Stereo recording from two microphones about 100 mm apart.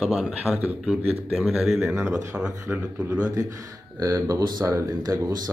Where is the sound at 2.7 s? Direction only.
35° right (ahead or behind).